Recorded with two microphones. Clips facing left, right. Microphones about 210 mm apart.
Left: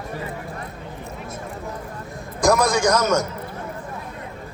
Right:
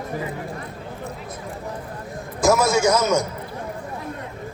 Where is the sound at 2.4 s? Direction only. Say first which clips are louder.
Even; 5° right (ahead or behind).